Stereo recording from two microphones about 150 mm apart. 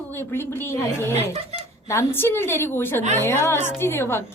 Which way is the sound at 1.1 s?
45° right (ahead or behind).